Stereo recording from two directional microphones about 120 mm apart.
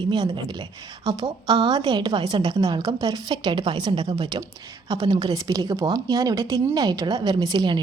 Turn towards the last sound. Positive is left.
turn(degrees=-35)  # may be behind; listen again after turning